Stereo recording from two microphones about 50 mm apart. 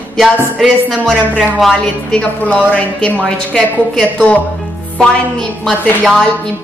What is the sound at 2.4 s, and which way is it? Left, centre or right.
Speech, left.